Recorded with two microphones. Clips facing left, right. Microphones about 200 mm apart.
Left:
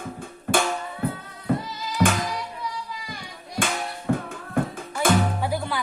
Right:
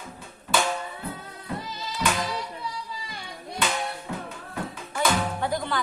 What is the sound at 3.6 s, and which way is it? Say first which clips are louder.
Music: left 1 dB; 50° left (ahead or behind).